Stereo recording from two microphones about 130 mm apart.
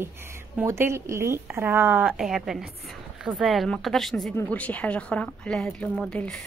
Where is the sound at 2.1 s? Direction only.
Centre (ahead or behind).